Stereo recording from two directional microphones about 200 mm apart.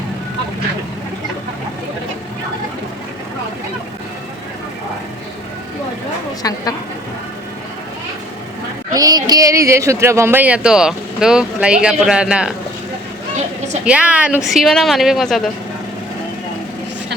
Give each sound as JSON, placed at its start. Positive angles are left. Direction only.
{"t": 6.4, "sound": "speech", "side_deg": 20}
{"t": 8.9, "sound": "speech", "side_deg": -20}
{"t": 13.8, "sound": "speech", "side_deg": -5}